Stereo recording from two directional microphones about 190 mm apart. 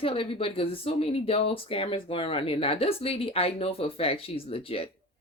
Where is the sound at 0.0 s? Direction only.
30° left (ahead or behind).